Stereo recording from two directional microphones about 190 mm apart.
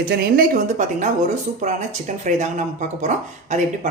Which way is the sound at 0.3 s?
40° right (ahead or behind).